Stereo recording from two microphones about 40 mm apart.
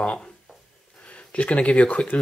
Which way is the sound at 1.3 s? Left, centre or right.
Left.